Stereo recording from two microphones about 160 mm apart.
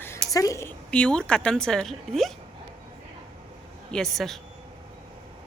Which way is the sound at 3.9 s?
Centre (ahead or behind).